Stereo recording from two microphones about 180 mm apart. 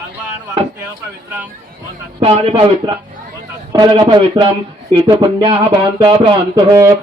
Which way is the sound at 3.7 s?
25° right (ahead or behind).